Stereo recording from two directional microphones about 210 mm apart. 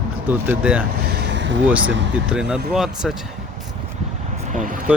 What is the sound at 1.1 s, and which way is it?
Vehicle, 55° right (ahead or behind).